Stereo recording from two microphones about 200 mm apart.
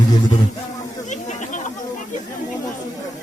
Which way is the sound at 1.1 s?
35° left (ahead or behind).